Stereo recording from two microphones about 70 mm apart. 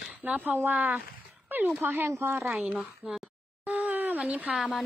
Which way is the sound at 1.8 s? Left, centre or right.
Right.